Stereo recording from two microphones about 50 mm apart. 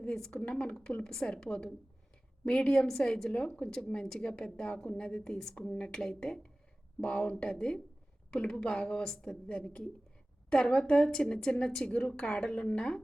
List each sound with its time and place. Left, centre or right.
0.0 s a woman's voice: centre
9.5 s a woman's voice: left